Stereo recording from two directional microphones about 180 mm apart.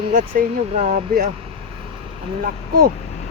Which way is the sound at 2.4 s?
50° right (ahead or behind).